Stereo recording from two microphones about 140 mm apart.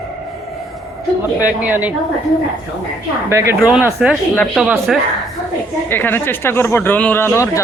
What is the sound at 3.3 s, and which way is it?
Speech, 20° right (ahead or behind).